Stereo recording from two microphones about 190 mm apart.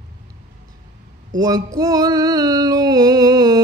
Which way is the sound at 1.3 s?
20° right (ahead or behind).